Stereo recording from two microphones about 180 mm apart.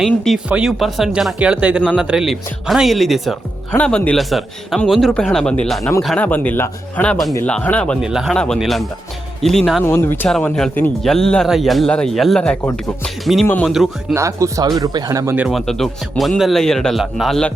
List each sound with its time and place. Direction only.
0.0 s speech: 5° right (ahead or behind)
1.8 s speech: 5° left (ahead or behind)
9.8 s speech: 15° left (ahead or behind)
14.1 s speech: 15° right (ahead or behind)
15.4 s speech: centre (ahead or behind)